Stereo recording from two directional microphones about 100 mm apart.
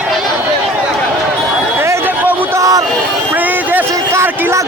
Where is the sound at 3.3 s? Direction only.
20° right (ahead or behind).